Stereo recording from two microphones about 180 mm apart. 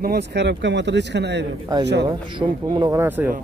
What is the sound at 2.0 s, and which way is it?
Speech, 25° right (ahead or behind).